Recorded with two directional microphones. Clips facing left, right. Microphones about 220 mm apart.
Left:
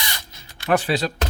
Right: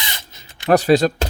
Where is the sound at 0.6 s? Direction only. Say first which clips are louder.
Right 7 dB; 40° right (ahead or behind).